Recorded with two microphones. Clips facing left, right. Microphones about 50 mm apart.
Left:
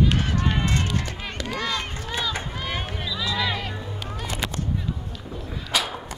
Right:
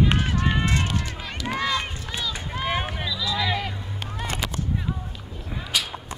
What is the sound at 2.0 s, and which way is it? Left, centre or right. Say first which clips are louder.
Run: left 3 dB; left.